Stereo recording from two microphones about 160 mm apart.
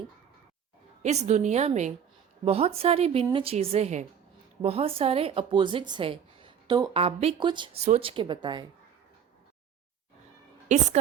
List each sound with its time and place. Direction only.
1.0 s a woman's voice: 45° right (ahead or behind); by 6.9 s 25° right (ahead or behind)
6.9 s speech: 35° right (ahead or behind)
7.8 s speech: 40° right (ahead or behind)
10.7 s a woman's voice: 45° right (ahead or behind)